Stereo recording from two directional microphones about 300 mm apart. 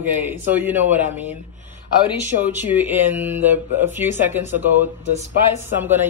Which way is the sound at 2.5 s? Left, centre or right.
Centre.